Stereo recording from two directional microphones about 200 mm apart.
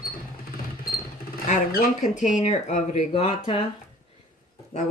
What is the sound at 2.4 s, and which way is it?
Speech, 35° left (ahead or behind).